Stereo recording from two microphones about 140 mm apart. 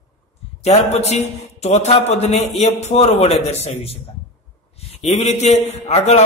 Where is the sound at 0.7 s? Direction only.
50° left (ahead or behind).